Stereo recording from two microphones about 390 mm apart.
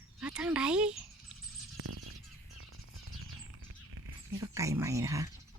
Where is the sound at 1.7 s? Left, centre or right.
Right.